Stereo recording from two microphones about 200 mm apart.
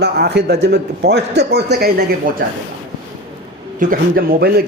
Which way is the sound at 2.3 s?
45° right (ahead or behind).